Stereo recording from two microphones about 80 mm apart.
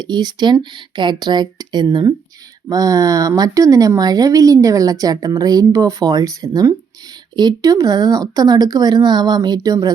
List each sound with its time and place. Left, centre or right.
0.0 s speech: right
2.6 s speech: right